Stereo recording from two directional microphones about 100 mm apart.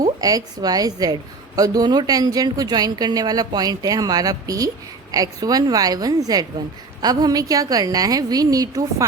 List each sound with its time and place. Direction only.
0.0 s a woman's voice: 40° right (ahead or behind)